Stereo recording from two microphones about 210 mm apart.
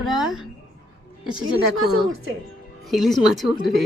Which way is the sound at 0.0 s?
Centre (ahead or behind).